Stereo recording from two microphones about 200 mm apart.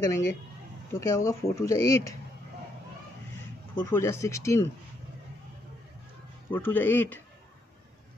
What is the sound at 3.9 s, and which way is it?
Speech, 15° left (ahead or behind).